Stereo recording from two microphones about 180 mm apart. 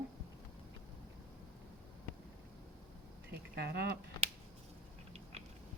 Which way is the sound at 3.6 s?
65° right (ahead or behind).